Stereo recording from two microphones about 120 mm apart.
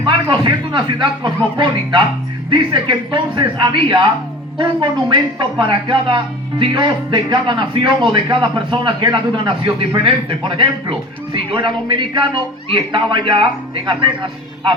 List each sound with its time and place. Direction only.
0.0 s a man's voice: 45° right (ahead or behind)